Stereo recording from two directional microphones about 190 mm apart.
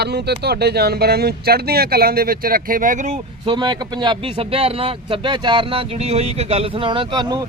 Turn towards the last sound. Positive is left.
turn(degrees=-25)  # may be behind; listen again after turning